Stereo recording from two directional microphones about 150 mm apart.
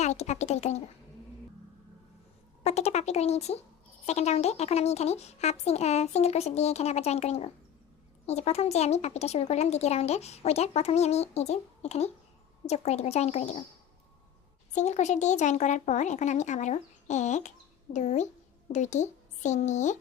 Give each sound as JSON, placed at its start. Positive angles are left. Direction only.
{"t": 0.0, "sound": "speech", "side_deg": 50}
{"t": 2.6, "sound": "speech", "side_deg": 45}
{"t": 14.8, "sound": "speech", "side_deg": 50}